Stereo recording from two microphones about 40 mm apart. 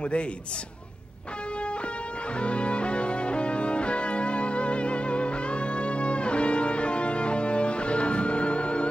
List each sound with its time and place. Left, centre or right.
2.3 s music: left